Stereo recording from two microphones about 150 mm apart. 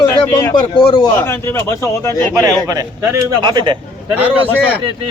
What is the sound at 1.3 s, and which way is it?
Speech, 15° left (ahead or behind).